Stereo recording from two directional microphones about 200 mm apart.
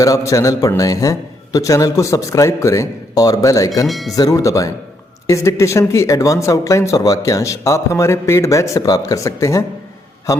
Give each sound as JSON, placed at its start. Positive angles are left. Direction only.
{"t": 0.0, "sound": "speech", "side_deg": 15}
{"t": 3.8, "sound": "speech", "side_deg": 0}
{"t": 4.1, "sound": "speech", "side_deg": 20}